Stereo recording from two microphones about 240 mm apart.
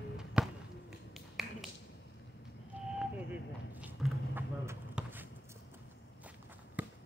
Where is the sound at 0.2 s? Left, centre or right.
Centre.